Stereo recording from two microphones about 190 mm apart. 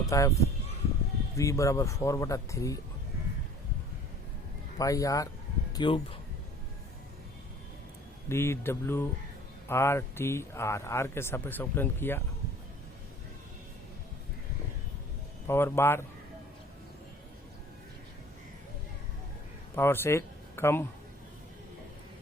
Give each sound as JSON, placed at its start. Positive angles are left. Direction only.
{"t": 0.1, "sound": "a man's voice", "side_deg": 15}
{"t": 4.8, "sound": "a man's voice", "side_deg": 15}
{"t": 8.3, "sound": "a man's voice", "side_deg": 15}
{"t": 15.4, "sound": "a man's voice", "side_deg": 10}
{"t": 19.7, "sound": "speech", "side_deg": 10}